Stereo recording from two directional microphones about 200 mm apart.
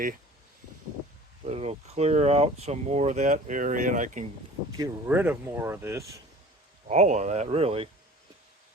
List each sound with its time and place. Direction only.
1.5 s speech: 30° right (ahead or behind)
4.8 s speech: 10° right (ahead or behind)
6.8 s speech: 35° right (ahead or behind)